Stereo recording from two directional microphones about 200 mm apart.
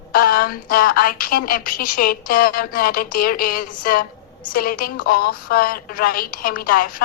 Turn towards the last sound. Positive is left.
turn(degrees=45)  # may be behind; listen again after turning